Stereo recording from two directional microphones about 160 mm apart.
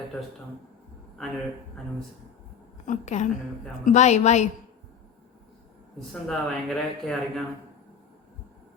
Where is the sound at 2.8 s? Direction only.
50° left (ahead or behind).